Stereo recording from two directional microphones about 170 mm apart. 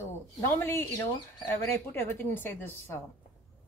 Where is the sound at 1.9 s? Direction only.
10° left (ahead or behind).